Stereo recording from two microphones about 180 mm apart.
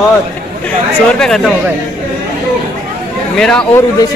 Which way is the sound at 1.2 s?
Centre (ahead or behind).